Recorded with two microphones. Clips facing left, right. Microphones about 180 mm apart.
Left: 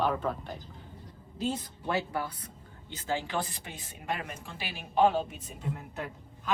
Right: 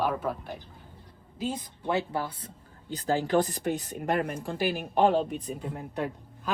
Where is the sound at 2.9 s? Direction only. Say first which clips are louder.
Right 7 dB; 40° right (ahead or behind).